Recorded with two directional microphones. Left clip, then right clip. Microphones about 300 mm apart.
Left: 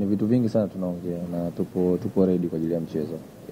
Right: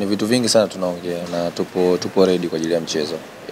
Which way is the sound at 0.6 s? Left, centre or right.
Centre.